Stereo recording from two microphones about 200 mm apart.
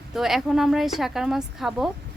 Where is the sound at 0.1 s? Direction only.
Centre (ahead or behind).